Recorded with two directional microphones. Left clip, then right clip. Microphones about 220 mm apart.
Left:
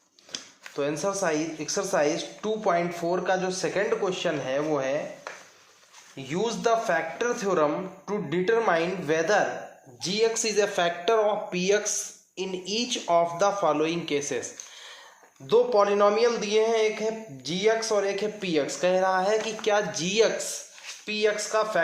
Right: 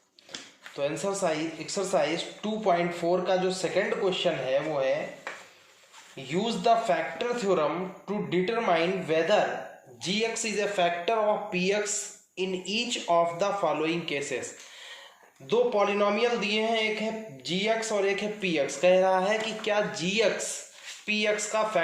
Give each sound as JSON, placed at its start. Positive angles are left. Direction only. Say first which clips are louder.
{"t": 0.8, "sound": "a woman's voice", "louder": "left 2 dB", "side_deg": 25}
{"t": 6.2, "sound": "a woman's voice", "louder": "right 1 dB", "side_deg": 20}